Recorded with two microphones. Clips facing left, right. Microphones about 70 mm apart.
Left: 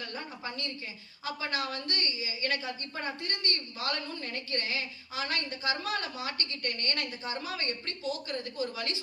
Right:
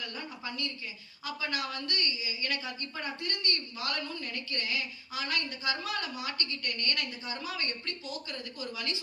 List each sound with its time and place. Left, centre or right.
0.0 s a woman's voice: left